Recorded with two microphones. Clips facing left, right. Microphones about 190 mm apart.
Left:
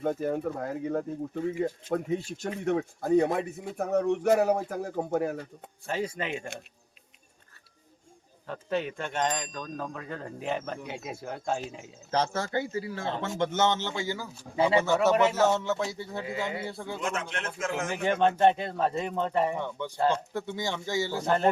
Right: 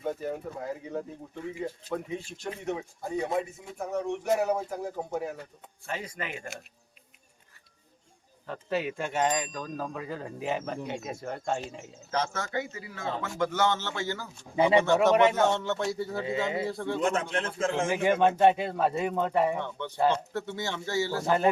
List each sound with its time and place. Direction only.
0.0 s speech: 50° left (ahead or behind)
5.8 s a man's voice: 30° left (ahead or behind)
8.4 s speech: 5° right (ahead or behind)
12.1 s a man's voice: 30° left (ahead or behind); by 14.3 s 15° left (ahead or behind)
14.5 s speech: 20° right (ahead or behind)
15.4 s speech: 5° left (ahead or behind)
16.2 s speech: 25° right (ahead or behind)
16.6 s speech: 5° left (ahead or behind)
17.0 s a man's voice: 35° right (ahead or behind)
17.9 s speech: 10° right (ahead or behind)
19.5 s speech: 10° left (ahead or behind)
21.2 s speech: 5° right (ahead or behind)